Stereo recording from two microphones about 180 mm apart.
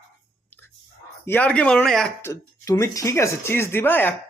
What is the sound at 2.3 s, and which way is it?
Speech, 15° left (ahead or behind).